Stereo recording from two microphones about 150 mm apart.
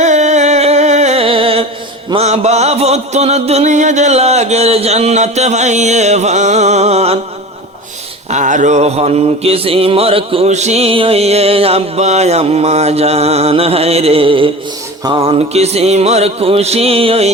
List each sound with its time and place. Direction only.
0.0 s a sound: 50° right (ahead or behind)
2.1 s mantra: 45° right (ahead or behind)
8.3 s mantra: 55° right (ahead or behind)